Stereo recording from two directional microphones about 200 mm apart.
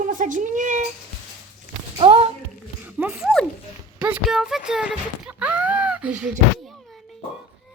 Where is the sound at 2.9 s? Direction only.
10° right (ahead or behind).